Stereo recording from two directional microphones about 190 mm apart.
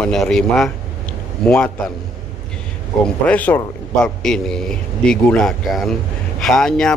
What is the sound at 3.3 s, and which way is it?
A man's voice, 10° left (ahead or behind).